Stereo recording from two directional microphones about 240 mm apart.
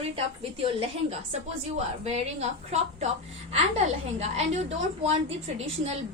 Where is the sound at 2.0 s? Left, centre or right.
Right.